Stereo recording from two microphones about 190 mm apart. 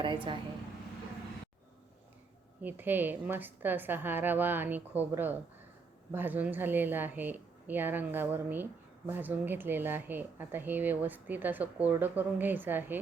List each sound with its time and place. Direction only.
0.0 s speech: 25° right (ahead or behind)
2.6 s speech: 10° right (ahead or behind)